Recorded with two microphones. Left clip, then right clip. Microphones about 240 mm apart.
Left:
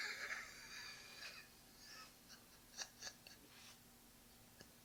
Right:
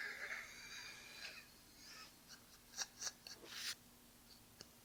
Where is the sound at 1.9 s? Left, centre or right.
Centre.